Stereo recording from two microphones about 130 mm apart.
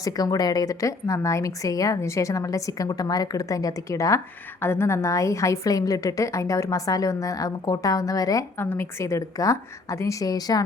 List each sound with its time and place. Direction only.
0.0 s a woman's voice: 30° left (ahead or behind)